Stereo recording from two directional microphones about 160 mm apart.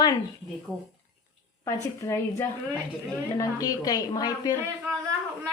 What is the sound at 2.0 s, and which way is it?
A woman's voice, 15° left (ahead or behind).